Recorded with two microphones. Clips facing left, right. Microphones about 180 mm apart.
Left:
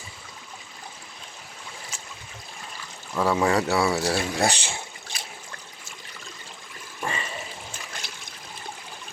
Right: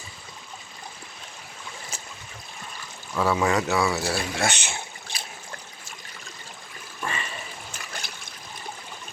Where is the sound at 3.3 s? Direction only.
35° left (ahead or behind).